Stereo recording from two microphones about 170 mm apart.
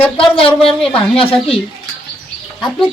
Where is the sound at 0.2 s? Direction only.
30° left (ahead or behind).